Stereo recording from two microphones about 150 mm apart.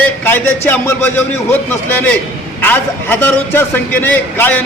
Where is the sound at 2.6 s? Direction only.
10° left (ahead or behind).